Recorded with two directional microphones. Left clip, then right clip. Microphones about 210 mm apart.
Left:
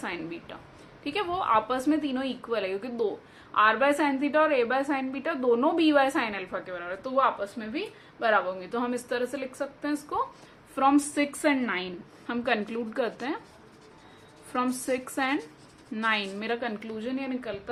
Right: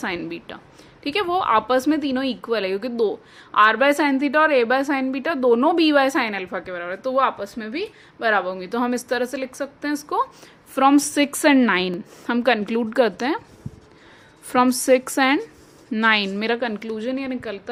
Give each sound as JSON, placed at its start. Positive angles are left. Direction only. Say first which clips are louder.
{"t": 0.0, "sound": "a woman's voice", "louder": "right 7 dB", "side_deg": -45}
{"t": 14.5, "sound": "a woman's voice", "louder": "right 12 dB", "side_deg": -45}